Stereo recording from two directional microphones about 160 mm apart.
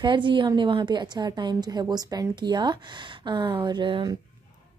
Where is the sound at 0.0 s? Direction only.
30° right (ahead or behind).